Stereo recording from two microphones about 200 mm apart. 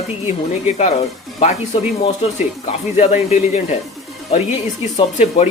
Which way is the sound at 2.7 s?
30° left (ahead or behind).